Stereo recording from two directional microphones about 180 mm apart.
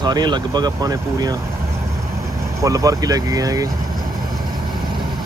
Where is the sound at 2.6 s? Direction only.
20° right (ahead or behind).